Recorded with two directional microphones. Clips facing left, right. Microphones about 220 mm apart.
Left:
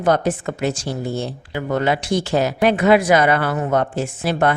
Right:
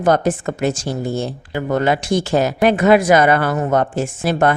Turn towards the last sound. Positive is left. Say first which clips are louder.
# right 2 dB
turn(degrees=-45)  # may be behind; listen again after turning